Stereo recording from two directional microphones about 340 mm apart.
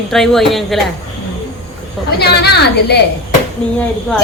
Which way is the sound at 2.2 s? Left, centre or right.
Left.